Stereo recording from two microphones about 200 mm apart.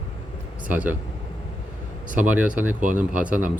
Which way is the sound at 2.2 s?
10° right (ahead or behind).